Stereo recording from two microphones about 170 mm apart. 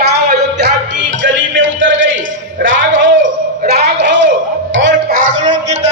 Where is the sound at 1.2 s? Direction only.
90° right.